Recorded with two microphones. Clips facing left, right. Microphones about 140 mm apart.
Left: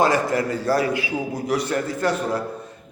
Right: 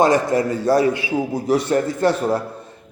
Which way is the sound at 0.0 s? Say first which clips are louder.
Right 3 dB; 20° right (ahead or behind).